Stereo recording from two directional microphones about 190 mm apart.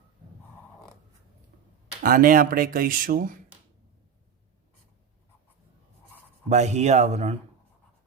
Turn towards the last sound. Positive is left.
turn(degrees=-35)  # may be behind; listen again after turning